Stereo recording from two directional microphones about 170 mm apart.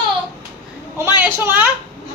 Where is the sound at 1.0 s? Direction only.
15° right (ahead or behind).